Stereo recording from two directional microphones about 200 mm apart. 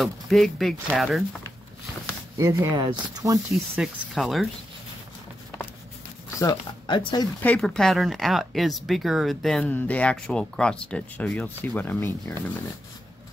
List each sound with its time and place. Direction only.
0.0 s speech: centre (ahead or behind)
2.3 s speech: 15° right (ahead or behind)
3.7 s speech: centre (ahead or behind)
6.4 s speech: 25° left (ahead or behind)
7.4 s speech: 5° left (ahead or behind)